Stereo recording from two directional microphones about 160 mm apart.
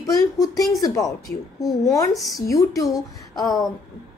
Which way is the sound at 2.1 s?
Centre (ahead or behind).